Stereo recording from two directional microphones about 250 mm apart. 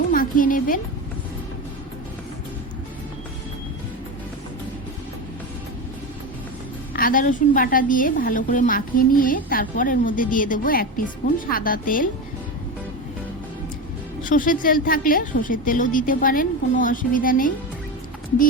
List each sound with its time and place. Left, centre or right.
0.1 s music: left
6.9 s a woman's voice: left
14.3 s a woman's voice: left